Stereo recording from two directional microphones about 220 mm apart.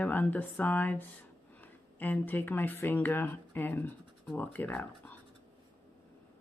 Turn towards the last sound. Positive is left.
turn(degrees=10)  # may be behind; listen again after turning